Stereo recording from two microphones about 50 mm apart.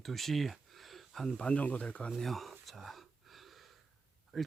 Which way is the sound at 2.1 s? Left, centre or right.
Centre.